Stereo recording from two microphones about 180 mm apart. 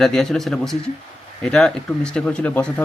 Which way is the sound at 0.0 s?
Centre (ahead or behind).